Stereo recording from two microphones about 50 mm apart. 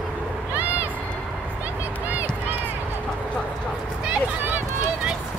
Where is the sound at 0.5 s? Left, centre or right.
Right.